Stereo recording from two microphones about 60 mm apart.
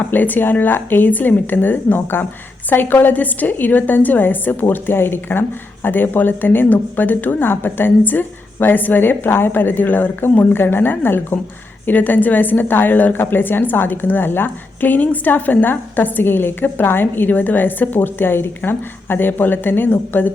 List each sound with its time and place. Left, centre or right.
0.1 s a woman's voice: left